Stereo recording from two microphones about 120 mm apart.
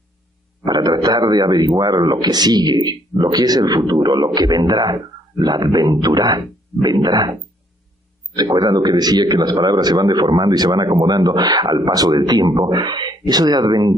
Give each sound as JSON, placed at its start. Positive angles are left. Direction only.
{"t": 0.7, "sound": "a man's voice", "side_deg": -35}
{"t": 8.4, "sound": "speech", "side_deg": -30}